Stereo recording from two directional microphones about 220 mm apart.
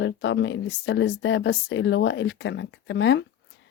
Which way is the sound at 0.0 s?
55° left (ahead or behind).